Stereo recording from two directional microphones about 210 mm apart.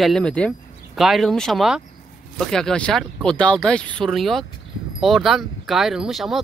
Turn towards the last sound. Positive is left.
turn(degrees=0)  # may be behind; listen again after turning